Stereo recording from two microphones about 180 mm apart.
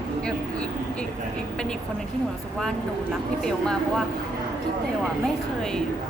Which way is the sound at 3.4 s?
Centre (ahead or behind).